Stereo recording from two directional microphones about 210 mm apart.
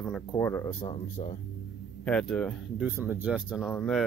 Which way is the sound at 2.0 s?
5° left (ahead or behind).